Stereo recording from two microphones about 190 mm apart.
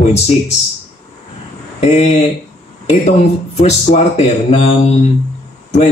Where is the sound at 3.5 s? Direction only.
35° left (ahead or behind).